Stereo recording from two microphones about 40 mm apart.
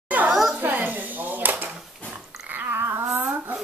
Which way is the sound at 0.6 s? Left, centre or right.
Right.